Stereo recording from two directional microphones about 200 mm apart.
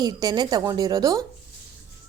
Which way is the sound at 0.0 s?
20° right (ahead or behind).